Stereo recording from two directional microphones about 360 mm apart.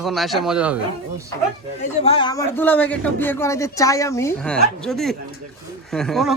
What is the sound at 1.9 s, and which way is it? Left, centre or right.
A man's voice, centre.